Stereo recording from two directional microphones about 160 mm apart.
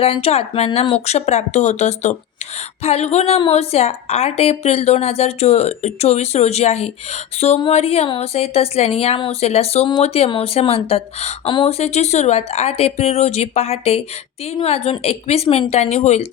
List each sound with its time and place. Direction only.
0.0 s a woman's voice: 35° left (ahead or behind)